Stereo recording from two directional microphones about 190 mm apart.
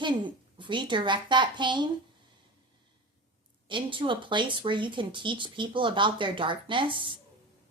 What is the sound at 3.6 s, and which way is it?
A woman's voice, 25° right (ahead or behind).